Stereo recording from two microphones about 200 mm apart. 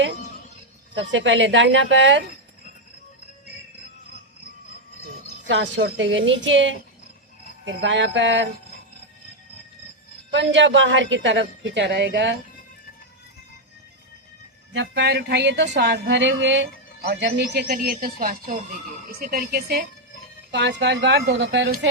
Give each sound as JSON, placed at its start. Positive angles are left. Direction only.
{"t": 0.9, "sound": "speech", "side_deg": -65}
{"t": 5.5, "sound": "a woman's voice", "side_deg": -65}
{"t": 10.3, "sound": "a woman's voice", "side_deg": -65}
{"t": 14.7, "sound": "a woman's voice", "side_deg": -65}
{"t": 20.5, "sound": "a woman's voice", "side_deg": -60}